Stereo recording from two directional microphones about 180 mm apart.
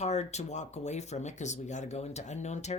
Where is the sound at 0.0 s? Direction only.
40° left (ahead or behind).